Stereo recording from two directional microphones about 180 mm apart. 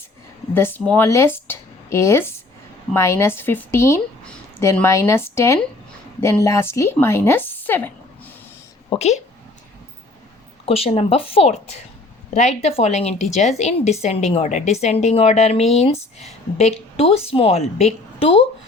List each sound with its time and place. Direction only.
0.5 s speech: 10° left (ahead or behind)
8.9 s a woman's voice: 35° left (ahead or behind)
10.7 s a woman's voice: 35° left (ahead or behind)